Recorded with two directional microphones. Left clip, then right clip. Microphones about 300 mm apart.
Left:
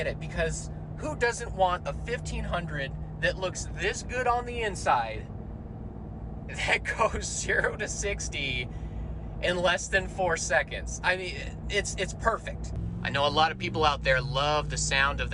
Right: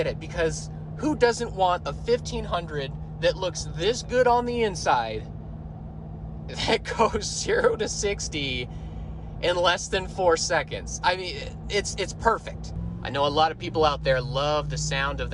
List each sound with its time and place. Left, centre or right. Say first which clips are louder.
0.0 s speech: right 5 dB; right
6.6 s speech: right 3 dB; centre
13.0 s speech: right 2 dB; centre